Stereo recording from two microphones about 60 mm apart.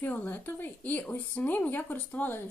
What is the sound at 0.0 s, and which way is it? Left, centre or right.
Speech, left.